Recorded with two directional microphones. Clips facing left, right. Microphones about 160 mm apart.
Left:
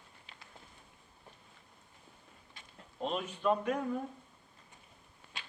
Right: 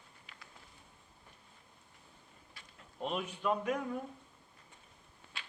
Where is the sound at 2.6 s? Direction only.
20° left (ahead or behind).